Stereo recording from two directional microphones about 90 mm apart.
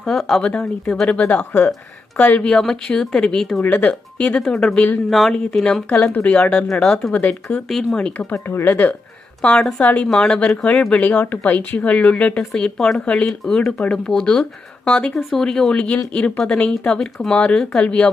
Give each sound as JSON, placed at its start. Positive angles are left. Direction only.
{"t": 0.0, "sound": "speech", "side_deg": 5}
{"t": 3.6, "sound": "speech", "side_deg": 15}
{"t": 8.3, "sound": "speech", "side_deg": 25}